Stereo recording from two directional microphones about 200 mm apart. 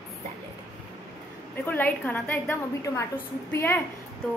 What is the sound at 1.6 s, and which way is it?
A woman's voice, 10° left (ahead or behind).